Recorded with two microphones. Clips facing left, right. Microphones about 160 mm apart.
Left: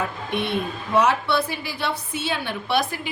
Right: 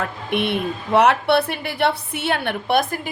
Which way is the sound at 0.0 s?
65° right (ahead or behind).